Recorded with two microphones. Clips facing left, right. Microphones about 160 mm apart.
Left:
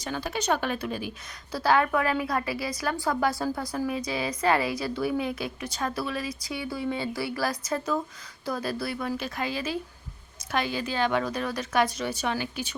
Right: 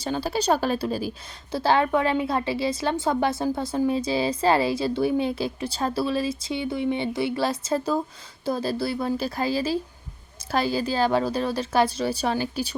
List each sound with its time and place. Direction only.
0.0 s a woman's voice: 30° right (ahead or behind)